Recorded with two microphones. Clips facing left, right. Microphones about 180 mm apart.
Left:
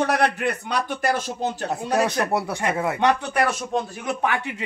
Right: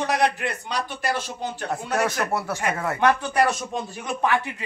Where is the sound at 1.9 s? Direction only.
20° left (ahead or behind).